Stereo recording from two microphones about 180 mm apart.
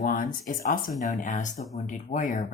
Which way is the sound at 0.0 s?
50° left (ahead or behind).